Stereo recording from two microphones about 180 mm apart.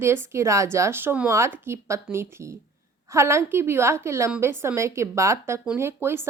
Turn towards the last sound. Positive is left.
turn(degrees=-15)  # may be behind; listen again after turning